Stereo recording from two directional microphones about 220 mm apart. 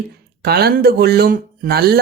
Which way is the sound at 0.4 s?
45° right (ahead or behind).